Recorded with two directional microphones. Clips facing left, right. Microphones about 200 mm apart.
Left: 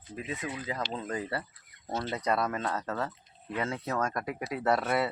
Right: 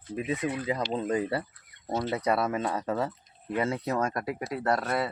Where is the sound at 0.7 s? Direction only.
20° right (ahead or behind).